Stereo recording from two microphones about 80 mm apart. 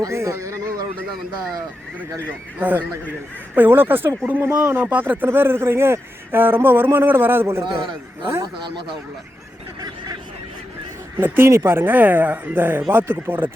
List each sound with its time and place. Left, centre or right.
0.0 s speech: right
2.6 s speech: right
7.6 s a man's voice: right
11.2 s speech: right